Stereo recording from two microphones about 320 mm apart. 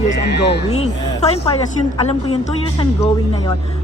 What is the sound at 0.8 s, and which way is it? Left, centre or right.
Speech, centre.